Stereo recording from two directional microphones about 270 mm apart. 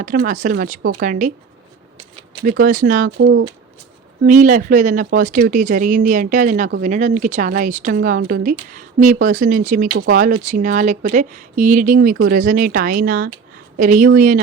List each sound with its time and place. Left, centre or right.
0.3 s speech: right
2.4 s speech: right
4.2 s speech: right